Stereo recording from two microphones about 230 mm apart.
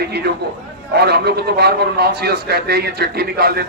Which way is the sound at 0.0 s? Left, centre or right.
Right.